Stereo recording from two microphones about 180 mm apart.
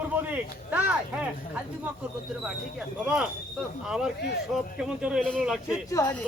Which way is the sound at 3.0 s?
5° right (ahead or behind).